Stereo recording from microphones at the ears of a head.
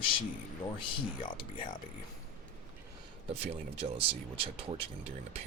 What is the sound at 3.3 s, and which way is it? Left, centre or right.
Speech, right.